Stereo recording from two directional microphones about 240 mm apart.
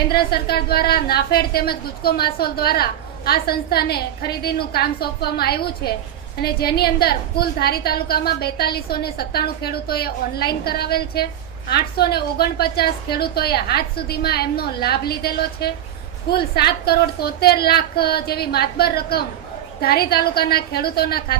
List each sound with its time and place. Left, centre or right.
0.1 s a woman's voice: left